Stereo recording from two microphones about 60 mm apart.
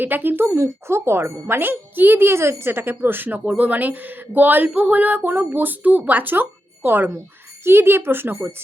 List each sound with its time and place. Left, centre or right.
0.0 s speech: right